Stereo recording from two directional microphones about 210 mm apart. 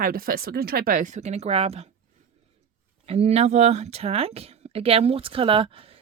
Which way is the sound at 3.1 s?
30° right (ahead or behind).